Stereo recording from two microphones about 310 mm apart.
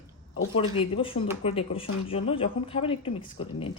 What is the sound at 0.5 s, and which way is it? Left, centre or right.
Speech, centre.